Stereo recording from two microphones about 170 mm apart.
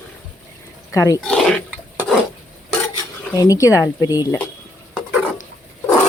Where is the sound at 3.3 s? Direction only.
20° left (ahead or behind).